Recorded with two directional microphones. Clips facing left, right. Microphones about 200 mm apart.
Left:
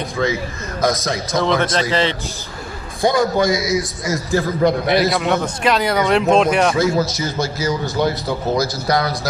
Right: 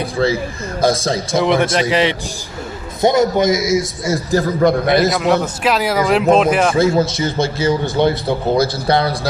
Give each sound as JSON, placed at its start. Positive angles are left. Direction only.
{"t": 0.2, "sound": "a man's voice", "side_deg": -35}
{"t": 1.7, "sound": "a man's voice", "side_deg": -15}
{"t": 5.1, "sound": "speech", "side_deg": 0}
{"t": 6.7, "sound": "a man's voice", "side_deg": -30}